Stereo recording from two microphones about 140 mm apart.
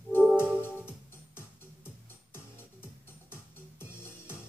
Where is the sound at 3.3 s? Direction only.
15° left (ahead or behind).